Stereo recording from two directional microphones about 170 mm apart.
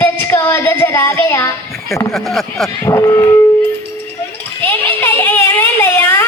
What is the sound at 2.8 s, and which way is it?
Speech, 15° left (ahead or behind).